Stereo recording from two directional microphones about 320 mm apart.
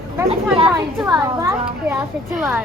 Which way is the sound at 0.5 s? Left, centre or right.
Centre.